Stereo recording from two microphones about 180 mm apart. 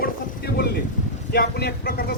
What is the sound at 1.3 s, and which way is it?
Speech, 60° left (ahead or behind).